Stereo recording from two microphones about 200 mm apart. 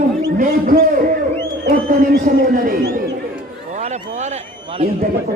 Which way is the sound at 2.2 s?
45° right (ahead or behind).